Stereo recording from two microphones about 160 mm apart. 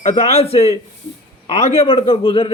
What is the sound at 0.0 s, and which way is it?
Speech, 40° left (ahead or behind).